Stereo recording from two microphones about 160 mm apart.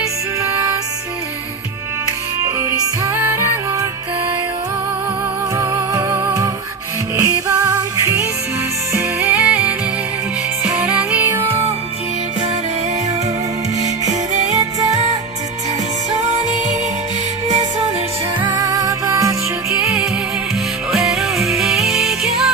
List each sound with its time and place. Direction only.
2.6 s music: 20° right (ahead or behind)
5.5 s music: 15° right (ahead or behind)
13.7 s music: 45° right (ahead or behind)
14.6 s music: 20° right (ahead or behind)
16.1 s music: 45° right (ahead or behind)
18.3 s music: 25° right (ahead or behind)
20.9 s music: centre (ahead or behind)